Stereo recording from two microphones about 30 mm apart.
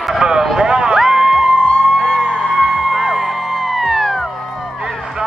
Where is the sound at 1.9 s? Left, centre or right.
Centre.